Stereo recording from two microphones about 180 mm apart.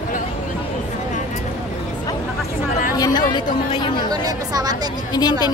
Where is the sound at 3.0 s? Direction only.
20° left (ahead or behind).